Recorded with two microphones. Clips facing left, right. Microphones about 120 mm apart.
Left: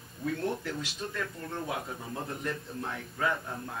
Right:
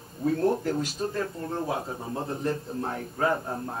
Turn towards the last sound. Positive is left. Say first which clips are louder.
# right 5 dB
turn(degrees=-35)  # may be behind; listen again after turning